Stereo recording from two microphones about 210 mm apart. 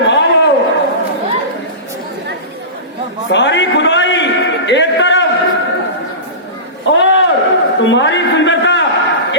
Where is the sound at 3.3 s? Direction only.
60° left (ahead or behind).